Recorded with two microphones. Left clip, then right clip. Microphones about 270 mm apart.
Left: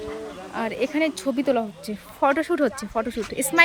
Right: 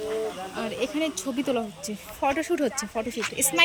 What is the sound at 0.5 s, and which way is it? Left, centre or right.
Speech, centre.